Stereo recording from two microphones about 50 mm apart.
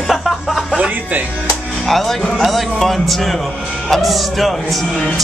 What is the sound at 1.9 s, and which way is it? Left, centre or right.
Speech, centre.